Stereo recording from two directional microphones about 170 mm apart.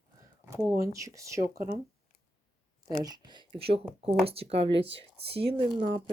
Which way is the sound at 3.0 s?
25° right (ahead or behind).